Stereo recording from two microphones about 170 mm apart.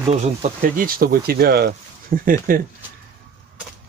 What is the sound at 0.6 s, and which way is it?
Speech, 60° right (ahead or behind).